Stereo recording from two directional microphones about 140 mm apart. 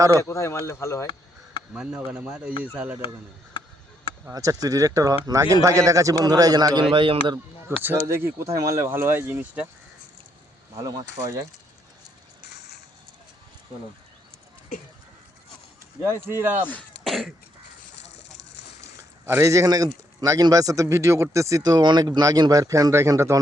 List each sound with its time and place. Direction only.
0.2 s speech: 20° left (ahead or behind)
1.7 s speech: 10° right (ahead or behind)
4.3 s speech: 25° right (ahead or behind)
7.8 s speech: 15° right (ahead or behind)
16.2 s speech: 15° right (ahead or behind)
16.6 s throat clearing: 10° left (ahead or behind)
17.1 s cough: centre (ahead or behind)
18.8 s a sound: 20° right (ahead or behind)
20.2 s speech: 25° right (ahead or behind)